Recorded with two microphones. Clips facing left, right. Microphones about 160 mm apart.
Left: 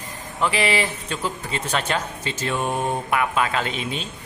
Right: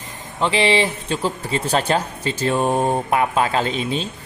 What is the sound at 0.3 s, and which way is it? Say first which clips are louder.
A man's voice: right 4 dB; 25° right (ahead or behind).